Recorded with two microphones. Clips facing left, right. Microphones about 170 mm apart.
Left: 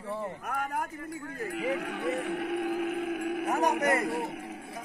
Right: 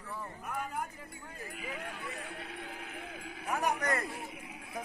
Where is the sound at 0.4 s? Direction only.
70° left (ahead or behind).